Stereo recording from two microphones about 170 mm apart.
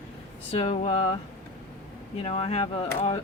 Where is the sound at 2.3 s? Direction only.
35° left (ahead or behind).